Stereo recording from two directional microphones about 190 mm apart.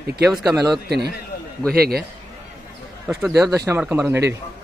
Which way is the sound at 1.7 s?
55° right (ahead or behind).